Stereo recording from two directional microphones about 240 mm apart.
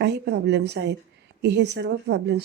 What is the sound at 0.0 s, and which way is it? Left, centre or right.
Speech, right.